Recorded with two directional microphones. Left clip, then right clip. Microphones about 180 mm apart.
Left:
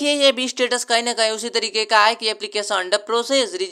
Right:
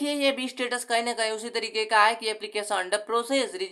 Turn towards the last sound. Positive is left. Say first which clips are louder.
# left 7 dB
turn(degrees=25)  # may be behind; listen again after turning